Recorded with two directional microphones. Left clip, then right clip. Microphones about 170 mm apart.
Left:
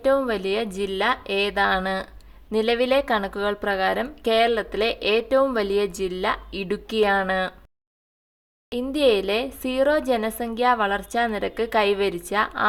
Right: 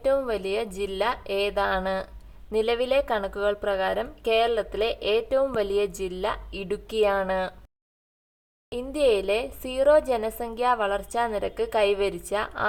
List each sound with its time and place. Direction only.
0.0 s speech: 30° left (ahead or behind)
8.7 s speech: 25° left (ahead or behind)